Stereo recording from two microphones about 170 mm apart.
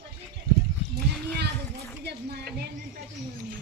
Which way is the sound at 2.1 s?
65° right (ahead or behind).